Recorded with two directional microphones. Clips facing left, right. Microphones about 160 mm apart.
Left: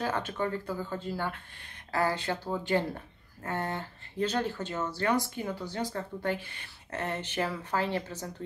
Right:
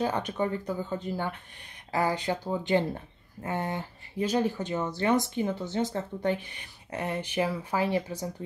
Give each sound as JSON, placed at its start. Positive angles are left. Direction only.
{"t": 0.0, "sound": "speech", "side_deg": -15}